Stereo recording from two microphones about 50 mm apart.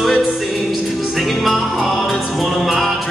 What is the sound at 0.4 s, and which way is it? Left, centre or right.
Music, centre.